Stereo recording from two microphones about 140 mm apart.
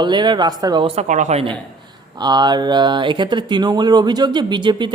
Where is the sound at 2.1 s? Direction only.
30° right (ahead or behind).